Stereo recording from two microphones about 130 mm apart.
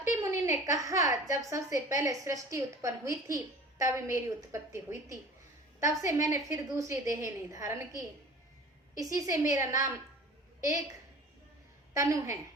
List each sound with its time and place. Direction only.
0.2 s a woman's voice: 20° right (ahead or behind)
9.1 s a woman's voice: 25° right (ahead or behind)
11.9 s a woman's voice: 25° right (ahead or behind)